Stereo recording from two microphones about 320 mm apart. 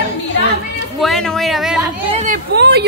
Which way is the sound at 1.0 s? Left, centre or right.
Centre.